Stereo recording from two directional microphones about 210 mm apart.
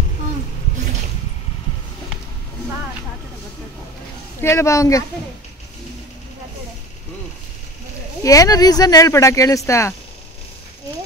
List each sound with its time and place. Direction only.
4.4 s speech: 15° left (ahead or behind)
8.2 s speech: 15° left (ahead or behind)